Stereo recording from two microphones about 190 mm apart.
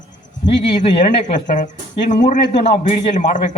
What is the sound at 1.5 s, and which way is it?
A man's voice, 40° left (ahead or behind).